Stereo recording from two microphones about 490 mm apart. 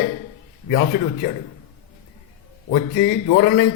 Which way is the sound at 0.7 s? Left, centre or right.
Centre.